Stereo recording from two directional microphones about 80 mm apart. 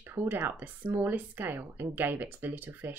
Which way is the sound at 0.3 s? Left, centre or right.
Right.